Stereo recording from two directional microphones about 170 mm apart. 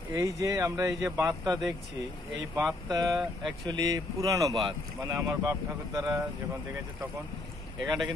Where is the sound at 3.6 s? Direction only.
25° right (ahead or behind).